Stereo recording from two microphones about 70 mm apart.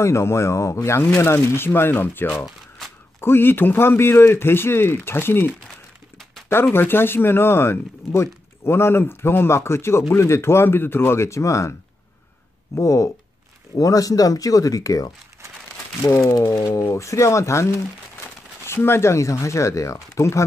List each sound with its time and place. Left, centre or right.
0.0 s speech: left
6.5 s speech: left
12.7 s speech: left
16.2 s speech: left
18.9 s speech: left